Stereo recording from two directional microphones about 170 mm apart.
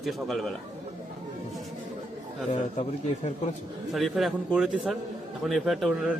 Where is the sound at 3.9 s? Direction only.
Centre (ahead or behind).